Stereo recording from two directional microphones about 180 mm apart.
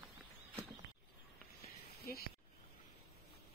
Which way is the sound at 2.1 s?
55° left (ahead or behind).